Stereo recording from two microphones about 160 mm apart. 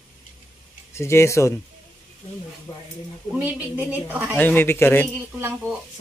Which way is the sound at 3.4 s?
10° right (ahead or behind).